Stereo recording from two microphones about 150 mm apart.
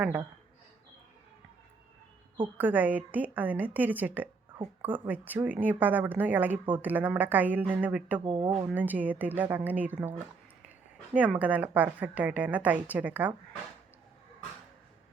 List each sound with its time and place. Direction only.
2.6 s a woman's voice: 10° right (ahead or behind)
8.2 s speech: 30° right (ahead or behind)
8.6 s a woman's voice: 10° right (ahead or behind)